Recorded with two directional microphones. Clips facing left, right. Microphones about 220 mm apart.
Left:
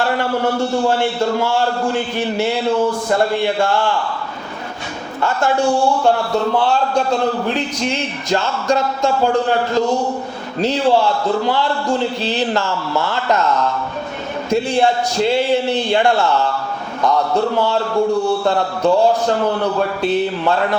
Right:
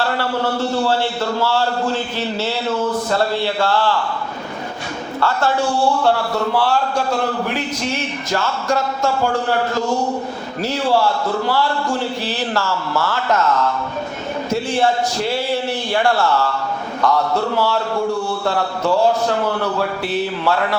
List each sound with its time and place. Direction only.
1.4 s a man's voice: 15° left (ahead or behind)
6.5 s speech: 20° left (ahead or behind)
10.6 s speech: 20° left (ahead or behind)
14.5 s a man's voice: 15° left (ahead or behind)
20.0 s speech: 20° left (ahead or behind)